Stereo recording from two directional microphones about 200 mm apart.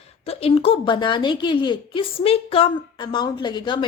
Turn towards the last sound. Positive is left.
turn(degrees=20)  # may be behind; listen again after turning